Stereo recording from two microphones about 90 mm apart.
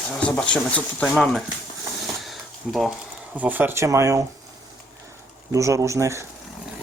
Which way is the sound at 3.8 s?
35° right (ahead or behind).